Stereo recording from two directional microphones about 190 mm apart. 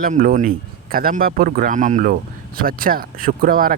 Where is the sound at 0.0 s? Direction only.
50° right (ahead or behind).